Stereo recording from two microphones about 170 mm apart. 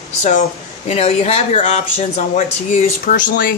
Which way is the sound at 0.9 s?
35° left (ahead or behind).